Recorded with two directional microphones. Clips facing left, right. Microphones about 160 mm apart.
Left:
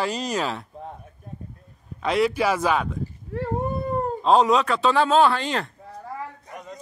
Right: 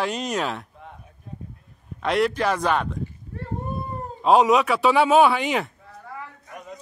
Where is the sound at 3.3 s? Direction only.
85° left.